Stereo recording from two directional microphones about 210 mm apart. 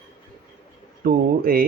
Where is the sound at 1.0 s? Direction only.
45° right (ahead or behind).